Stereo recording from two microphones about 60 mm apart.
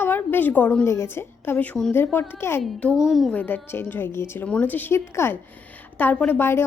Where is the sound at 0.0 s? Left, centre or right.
Left.